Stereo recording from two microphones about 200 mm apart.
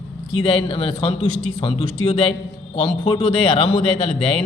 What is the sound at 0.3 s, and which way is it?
A man's voice, 25° left (ahead or behind).